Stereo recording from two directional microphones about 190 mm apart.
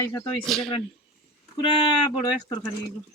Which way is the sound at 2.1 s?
20° left (ahead or behind).